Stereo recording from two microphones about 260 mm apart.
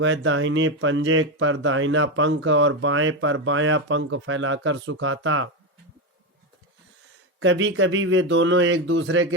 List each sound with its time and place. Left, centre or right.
0.0 s speech: right
7.3 s speech: right